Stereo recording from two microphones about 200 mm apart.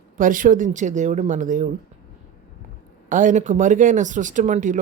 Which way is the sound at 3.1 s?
40° right (ahead or behind).